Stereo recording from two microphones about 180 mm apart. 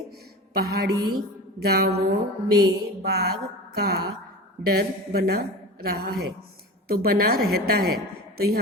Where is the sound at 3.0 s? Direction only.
60° right (ahead or behind).